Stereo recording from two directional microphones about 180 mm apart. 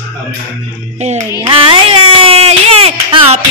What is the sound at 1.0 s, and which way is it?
Music, 40° right (ahead or behind).